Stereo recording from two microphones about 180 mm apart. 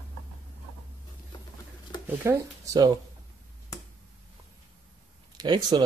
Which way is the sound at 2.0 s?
15° right (ahead or behind).